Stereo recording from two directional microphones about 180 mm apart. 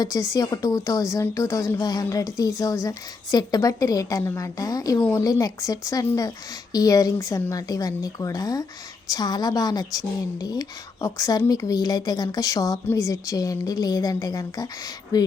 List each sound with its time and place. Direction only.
0.0 s a woman's voice: 20° left (ahead or behind)